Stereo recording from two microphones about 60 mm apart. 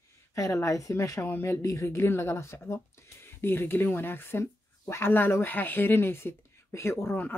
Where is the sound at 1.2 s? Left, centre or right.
Left.